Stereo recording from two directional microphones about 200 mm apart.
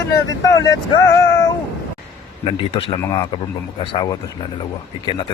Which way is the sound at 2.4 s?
25° left (ahead or behind).